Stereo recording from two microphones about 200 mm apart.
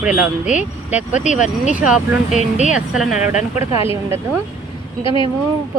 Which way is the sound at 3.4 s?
30° left (ahead or behind).